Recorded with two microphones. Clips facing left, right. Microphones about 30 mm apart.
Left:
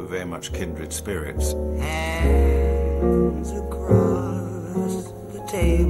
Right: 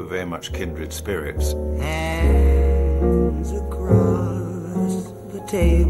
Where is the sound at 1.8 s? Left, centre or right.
Centre.